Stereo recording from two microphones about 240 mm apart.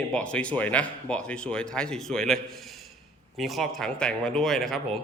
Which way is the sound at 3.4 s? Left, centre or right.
Centre.